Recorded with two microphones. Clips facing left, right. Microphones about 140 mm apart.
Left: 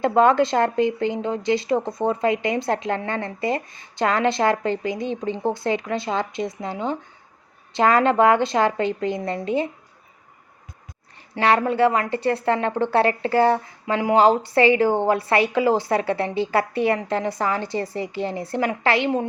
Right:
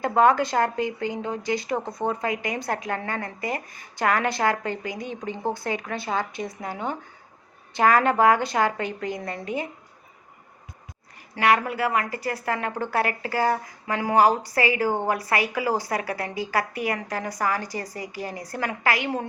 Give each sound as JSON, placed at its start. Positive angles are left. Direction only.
{"t": 0.0, "sound": "speech", "side_deg": 25}
{"t": 11.3, "sound": "speech", "side_deg": 30}